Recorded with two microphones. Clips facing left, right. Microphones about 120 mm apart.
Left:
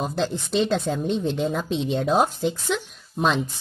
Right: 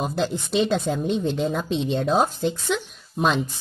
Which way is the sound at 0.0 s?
5° right (ahead or behind).